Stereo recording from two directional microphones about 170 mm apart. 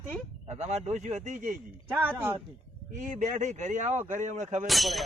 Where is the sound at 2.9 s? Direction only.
45° right (ahead or behind).